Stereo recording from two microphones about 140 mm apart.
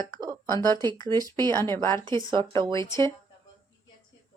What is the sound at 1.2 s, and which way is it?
Speech, 30° right (ahead or behind).